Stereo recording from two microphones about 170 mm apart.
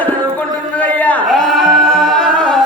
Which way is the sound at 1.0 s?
Centre (ahead or behind).